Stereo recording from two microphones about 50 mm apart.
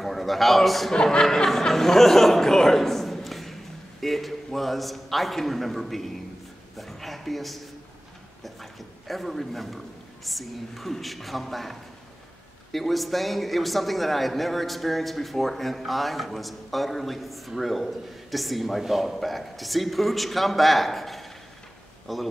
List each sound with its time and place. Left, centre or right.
0.0 s a man's voice: centre
12.7 s speech: centre